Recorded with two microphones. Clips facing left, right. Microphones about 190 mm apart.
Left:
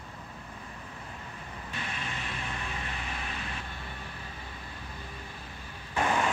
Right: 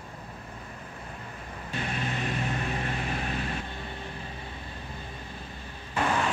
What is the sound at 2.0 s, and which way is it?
Vehicle, 40° right (ahead or behind).